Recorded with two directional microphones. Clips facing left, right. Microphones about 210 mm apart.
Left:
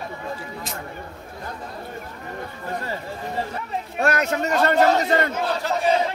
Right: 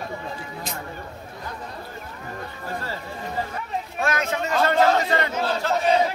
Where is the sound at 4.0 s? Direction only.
40° left (ahead or behind).